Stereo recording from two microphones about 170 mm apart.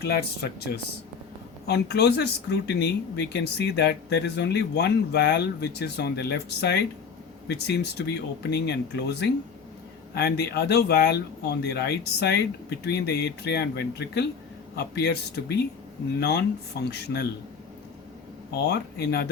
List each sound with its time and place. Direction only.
0.0 s speech: 70° left (ahead or behind)
16.8 s speech: 75° left (ahead or behind)
18.5 s speech: 75° left (ahead or behind)